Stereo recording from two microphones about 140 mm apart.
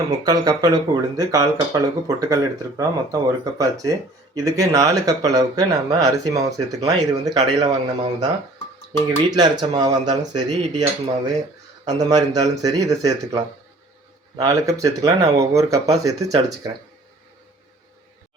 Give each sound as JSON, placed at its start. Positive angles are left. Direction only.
{"t": 0.3, "sound": "speech", "side_deg": -25}
{"t": 8.9, "sound": "speech", "side_deg": -30}
{"t": 11.9, "sound": "speech", "side_deg": -30}